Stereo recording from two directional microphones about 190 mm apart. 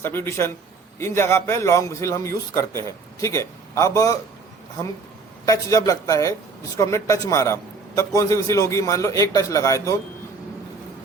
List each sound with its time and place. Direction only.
0.0 s speech: 10° left (ahead or behind)
5.5 s speech: 20° left (ahead or behind)